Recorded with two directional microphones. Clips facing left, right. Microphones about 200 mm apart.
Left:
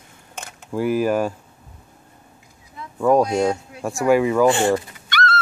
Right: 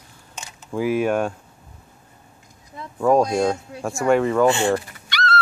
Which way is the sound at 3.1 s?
Centre (ahead or behind).